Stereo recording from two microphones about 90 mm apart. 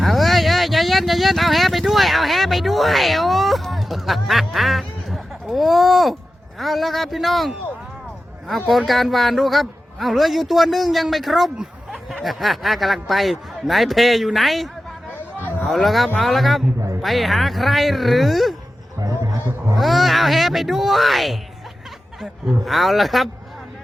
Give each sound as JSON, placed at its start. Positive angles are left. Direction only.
{"t": 0.0, "sound": "vehicle", "side_deg": 0}
{"t": 6.6, "sound": "a man's voice", "side_deg": 0}
{"t": 18.9, "sound": "music", "side_deg": -40}
{"t": 19.7, "sound": "a man's voice", "side_deg": 0}